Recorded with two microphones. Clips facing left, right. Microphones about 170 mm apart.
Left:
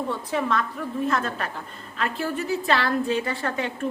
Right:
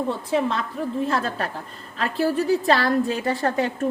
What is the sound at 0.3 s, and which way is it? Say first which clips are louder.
A woman's voice: right 1 dB; 25° right (ahead or behind).